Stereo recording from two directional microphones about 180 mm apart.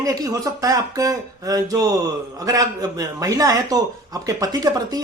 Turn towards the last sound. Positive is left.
turn(degrees=-20)  # may be behind; listen again after turning